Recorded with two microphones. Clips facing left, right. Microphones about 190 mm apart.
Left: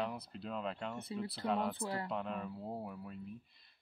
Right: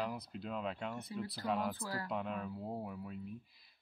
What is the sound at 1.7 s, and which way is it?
Speech, 25° left (ahead or behind).